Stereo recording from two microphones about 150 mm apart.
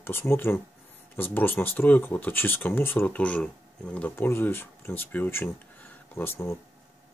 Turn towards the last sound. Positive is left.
turn(degrees=15)  # may be behind; listen again after turning